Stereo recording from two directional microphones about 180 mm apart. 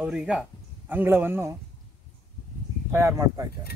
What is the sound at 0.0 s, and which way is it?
Speech, 5° right (ahead or behind).